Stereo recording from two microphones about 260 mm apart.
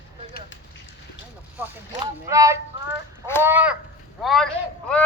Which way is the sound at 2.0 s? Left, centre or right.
Centre.